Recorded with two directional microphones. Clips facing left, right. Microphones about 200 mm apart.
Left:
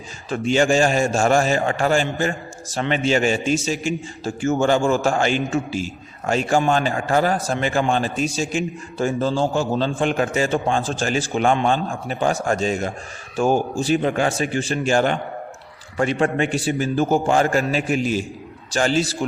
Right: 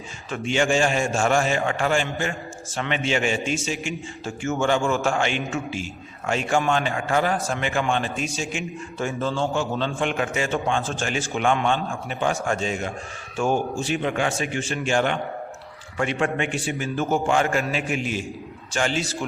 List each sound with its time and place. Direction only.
0.3 s a man's voice: 35° left (ahead or behind)